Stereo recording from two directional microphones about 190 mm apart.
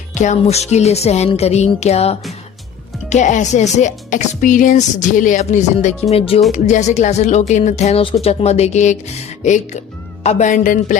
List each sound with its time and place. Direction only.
0.1 s speech: 40° left (ahead or behind)